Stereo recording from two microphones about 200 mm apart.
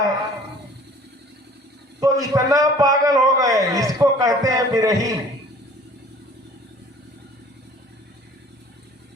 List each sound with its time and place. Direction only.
2.0 s a man's voice: 15° right (ahead or behind)